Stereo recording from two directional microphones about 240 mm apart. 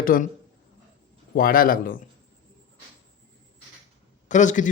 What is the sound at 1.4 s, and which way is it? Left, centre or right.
Speech, left.